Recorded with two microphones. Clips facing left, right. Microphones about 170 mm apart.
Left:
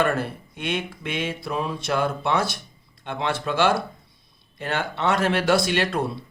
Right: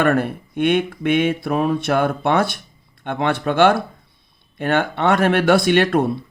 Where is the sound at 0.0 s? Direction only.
55° right (ahead or behind).